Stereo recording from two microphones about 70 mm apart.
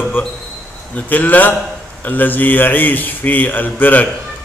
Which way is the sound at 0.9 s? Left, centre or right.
Left.